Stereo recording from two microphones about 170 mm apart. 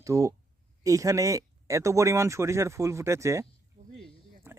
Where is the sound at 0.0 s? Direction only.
20° right (ahead or behind).